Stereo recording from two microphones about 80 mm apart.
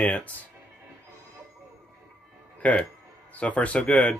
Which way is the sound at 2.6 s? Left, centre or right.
Centre.